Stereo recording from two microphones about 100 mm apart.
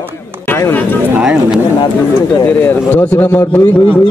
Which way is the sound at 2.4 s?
20° left (ahead or behind).